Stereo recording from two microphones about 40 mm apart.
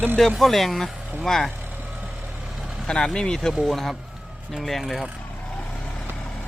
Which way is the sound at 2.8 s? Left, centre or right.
Left.